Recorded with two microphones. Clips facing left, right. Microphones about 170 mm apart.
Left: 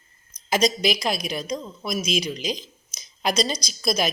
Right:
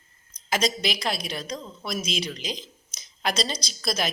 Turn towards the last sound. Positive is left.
turn(degrees=15)  # may be behind; listen again after turning